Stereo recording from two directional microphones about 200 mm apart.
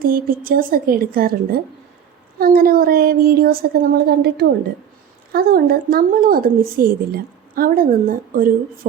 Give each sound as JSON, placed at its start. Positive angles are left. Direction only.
{"t": 0.0, "sound": "speech", "side_deg": -45}